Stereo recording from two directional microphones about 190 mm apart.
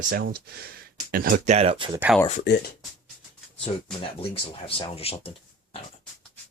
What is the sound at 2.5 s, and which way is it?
Speech, 65° left (ahead or behind).